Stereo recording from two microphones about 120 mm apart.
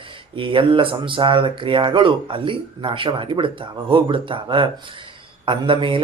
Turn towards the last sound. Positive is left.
turn(degrees=-45)  # may be behind; listen again after turning